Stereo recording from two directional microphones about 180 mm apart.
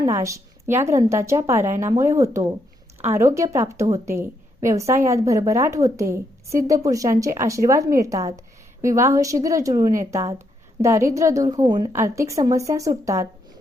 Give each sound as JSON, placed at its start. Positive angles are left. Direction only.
{"t": 0.0, "sound": "a woman's voice", "side_deg": -15}